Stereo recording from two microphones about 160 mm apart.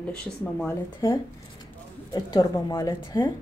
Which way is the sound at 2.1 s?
25° left (ahead or behind).